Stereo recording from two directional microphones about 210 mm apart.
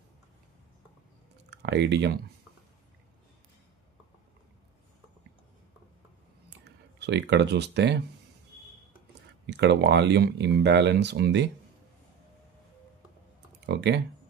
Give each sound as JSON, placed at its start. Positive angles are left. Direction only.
{"t": 1.5, "sound": "speech", "side_deg": -55}
{"t": 7.0, "sound": "speech", "side_deg": -55}
{"t": 9.5, "sound": "speech", "side_deg": -55}
{"t": 13.7, "sound": "speech", "side_deg": -55}